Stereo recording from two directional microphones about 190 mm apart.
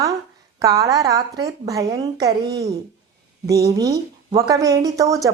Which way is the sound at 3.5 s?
15° right (ahead or behind).